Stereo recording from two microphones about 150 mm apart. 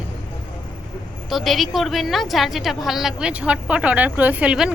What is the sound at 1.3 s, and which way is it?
A woman's voice, centre (ahead or behind).